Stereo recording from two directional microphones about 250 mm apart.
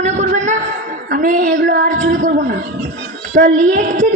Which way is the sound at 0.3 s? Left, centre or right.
Right.